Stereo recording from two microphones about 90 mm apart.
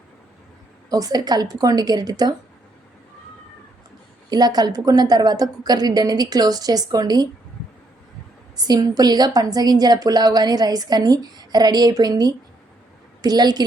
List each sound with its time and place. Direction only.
0.9 s a woman's voice: 45° right (ahead or behind)
4.3 s a woman's voice: 50° right (ahead or behind)
8.5 s a woman's voice: 50° right (ahead or behind)